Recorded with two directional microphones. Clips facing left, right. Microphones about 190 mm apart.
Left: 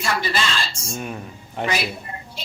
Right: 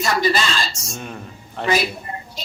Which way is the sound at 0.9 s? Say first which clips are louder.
Left 5 dB; 5° left (ahead or behind).